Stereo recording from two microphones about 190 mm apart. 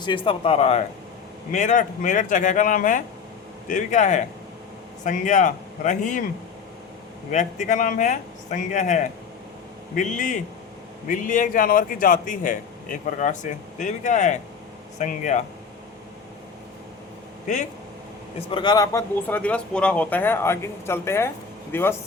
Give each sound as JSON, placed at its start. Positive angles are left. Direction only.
{"t": 0.0, "sound": "a man's voice", "side_deg": 25}
{"t": 7.3, "sound": "a man's voice", "side_deg": 40}
{"t": 17.4, "sound": "speech", "side_deg": 40}
{"t": 18.3, "sound": "speech", "side_deg": 25}
{"t": 19.3, "sound": "speech", "side_deg": 5}